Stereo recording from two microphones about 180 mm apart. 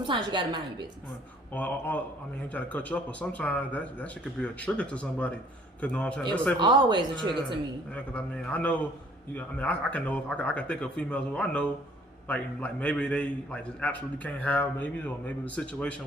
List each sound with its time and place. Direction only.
0.0 s a woman's voice: 25° right (ahead or behind)
1.5 s a man's voice: 10° left (ahead or behind)
6.6 s a woman's voice: 25° right (ahead or behind)
7.9 s a man's voice: 5° left (ahead or behind)